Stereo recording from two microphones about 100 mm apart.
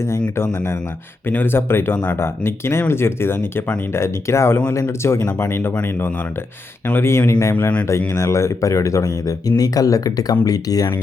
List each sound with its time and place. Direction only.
0.5 s speech: 25° left (ahead or behind)